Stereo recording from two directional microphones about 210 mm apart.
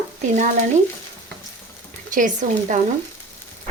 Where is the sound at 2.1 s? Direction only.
40° right (ahead or behind).